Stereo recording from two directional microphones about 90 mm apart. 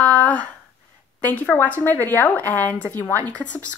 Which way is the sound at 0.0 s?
15° left (ahead or behind).